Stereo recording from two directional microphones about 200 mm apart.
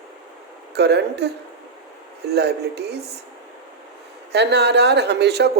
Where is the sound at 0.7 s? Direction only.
55° right (ahead or behind).